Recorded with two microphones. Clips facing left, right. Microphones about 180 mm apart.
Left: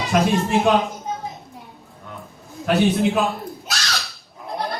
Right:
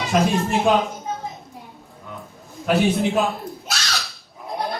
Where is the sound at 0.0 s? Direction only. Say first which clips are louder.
Left 1 dB; centre (ahead or behind).